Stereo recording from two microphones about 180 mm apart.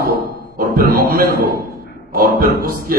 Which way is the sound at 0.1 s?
55° right (ahead or behind).